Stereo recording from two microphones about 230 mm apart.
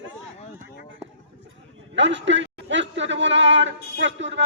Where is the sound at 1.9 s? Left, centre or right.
Right.